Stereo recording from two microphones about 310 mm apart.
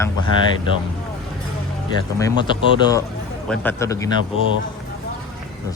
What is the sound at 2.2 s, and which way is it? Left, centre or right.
Speech, centre.